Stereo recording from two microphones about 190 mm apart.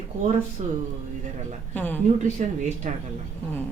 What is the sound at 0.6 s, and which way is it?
Speech, 40° right (ahead or behind).